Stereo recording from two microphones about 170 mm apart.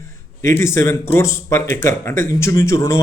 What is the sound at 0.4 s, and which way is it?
A man's voice, 15° left (ahead or behind).